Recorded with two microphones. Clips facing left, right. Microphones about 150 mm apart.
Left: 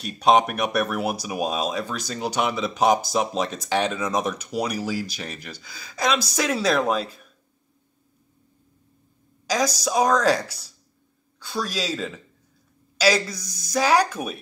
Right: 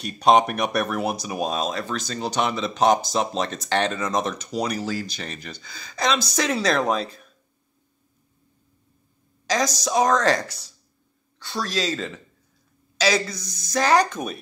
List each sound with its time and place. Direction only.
0.0 s speech: 5° left (ahead or behind)
9.5 s speech: 5° left (ahead or behind)